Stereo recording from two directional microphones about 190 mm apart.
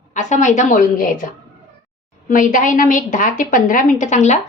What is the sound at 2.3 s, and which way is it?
A woman's voice, 45° left (ahead or behind).